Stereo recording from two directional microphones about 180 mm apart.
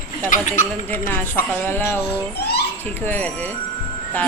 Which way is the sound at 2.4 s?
65° left (ahead or behind).